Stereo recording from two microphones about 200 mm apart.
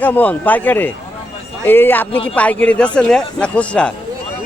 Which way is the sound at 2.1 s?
25° left (ahead or behind).